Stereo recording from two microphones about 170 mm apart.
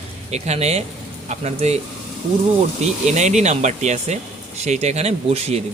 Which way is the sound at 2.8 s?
45° right (ahead or behind).